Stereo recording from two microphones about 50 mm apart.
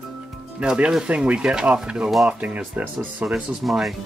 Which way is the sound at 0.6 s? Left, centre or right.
Right.